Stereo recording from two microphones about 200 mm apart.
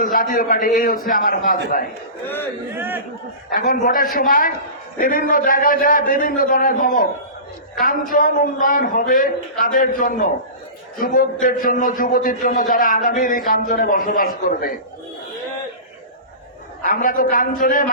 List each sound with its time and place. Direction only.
0.0 s a man's voice: 45° left (ahead or behind)
2.2 s speech: 10° left (ahead or behind)
2.7 s a man's voice: 10° right (ahead or behind)
3.5 s a man's voice: 45° left (ahead or behind)
16.8 s a man's voice: 45° left (ahead or behind)